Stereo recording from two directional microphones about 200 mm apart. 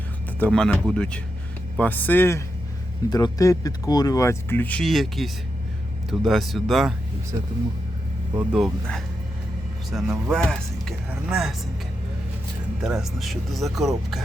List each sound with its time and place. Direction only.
0.3 s speech: 5° left (ahead or behind)
8.4 s speech: centre (ahead or behind)
9.9 s speech: 10° right (ahead or behind)
10.3 s speech: centre (ahead or behind)
12.8 s speech: centre (ahead or behind)